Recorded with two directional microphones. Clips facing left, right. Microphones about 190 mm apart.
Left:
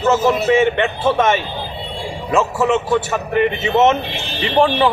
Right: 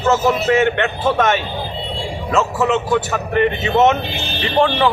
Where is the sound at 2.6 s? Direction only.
5° left (ahead or behind).